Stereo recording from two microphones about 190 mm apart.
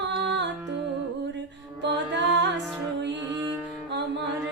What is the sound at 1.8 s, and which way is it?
Music, 65° right (ahead or behind).